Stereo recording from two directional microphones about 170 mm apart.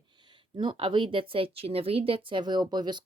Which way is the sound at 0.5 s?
30° right (ahead or behind).